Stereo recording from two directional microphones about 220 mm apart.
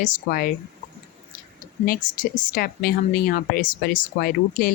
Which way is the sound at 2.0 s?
40° left (ahead or behind).